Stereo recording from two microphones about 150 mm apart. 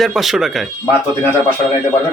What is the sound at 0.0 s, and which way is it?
Speech, centre (ahead or behind).